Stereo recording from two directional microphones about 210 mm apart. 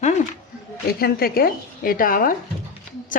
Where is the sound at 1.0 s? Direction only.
45° left (ahead or behind).